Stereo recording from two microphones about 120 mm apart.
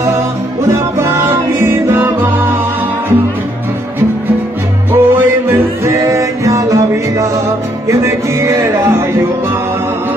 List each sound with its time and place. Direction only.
1.6 s music: 20° right (ahead or behind)
4.9 s music: 20° right (ahead or behind)